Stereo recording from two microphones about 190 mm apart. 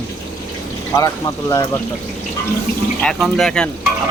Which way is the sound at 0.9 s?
15° left (ahead or behind).